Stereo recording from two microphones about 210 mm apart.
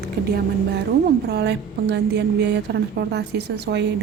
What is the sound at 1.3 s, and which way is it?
A woman's voice, 50° right (ahead or behind).